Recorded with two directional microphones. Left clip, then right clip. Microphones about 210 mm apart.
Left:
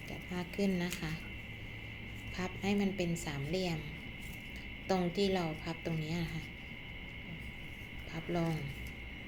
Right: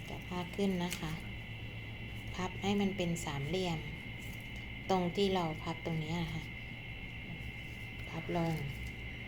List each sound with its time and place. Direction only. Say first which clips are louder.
0.3 s a woman's voice: even; 10° left (ahead or behind)
2.4 s a woman's voice: even; 5° left (ahead or behind)
4.9 s a woman's voice: right 1 dB; 5° left (ahead or behind)
8.1 s a woman's voice: even; 5° left (ahead or behind)